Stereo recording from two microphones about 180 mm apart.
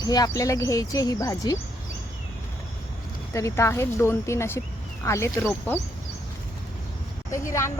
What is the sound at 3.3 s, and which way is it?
A woman's voice, 15° left (ahead or behind).